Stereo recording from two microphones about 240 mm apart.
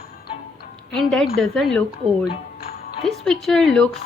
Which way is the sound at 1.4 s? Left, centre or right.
Centre.